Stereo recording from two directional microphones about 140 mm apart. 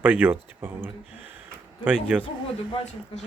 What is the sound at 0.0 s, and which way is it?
Speech, 10° right (ahead or behind).